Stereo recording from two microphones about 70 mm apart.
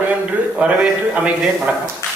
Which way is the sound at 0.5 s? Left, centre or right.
Centre.